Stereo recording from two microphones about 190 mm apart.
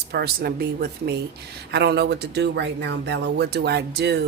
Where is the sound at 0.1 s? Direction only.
55° right (ahead or behind).